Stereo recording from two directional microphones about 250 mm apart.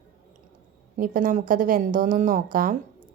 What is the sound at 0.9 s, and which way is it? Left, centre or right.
A woman's voice, right.